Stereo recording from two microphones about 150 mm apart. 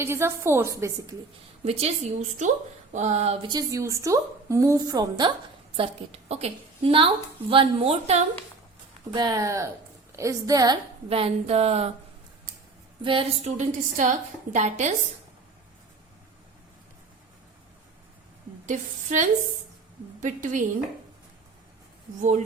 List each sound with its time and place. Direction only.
0.0 s a woman's voice: 15° right (ahead or behind)
1.6 s a woman's voice: 45° right (ahead or behind)
3.4 s a woman's voice: 25° right (ahead or behind)
5.7 s a woman's voice: 40° right (ahead or behind)
9.1 s a woman's voice: 25° right (ahead or behind)
11.1 s a woman's voice: 40° right (ahead or behind)
13.0 s a woman's voice: 35° right (ahead or behind)
13.5 s a woman's voice: 55° right (ahead or behind)
18.6 s a woman's voice: 55° right (ahead or behind)